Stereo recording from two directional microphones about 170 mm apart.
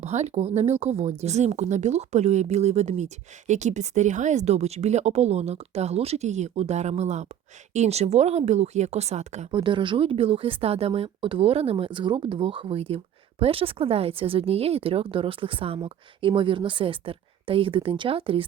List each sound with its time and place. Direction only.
0.0 s speech: 40° right (ahead or behind)
9.5 s speech: 30° right (ahead or behind)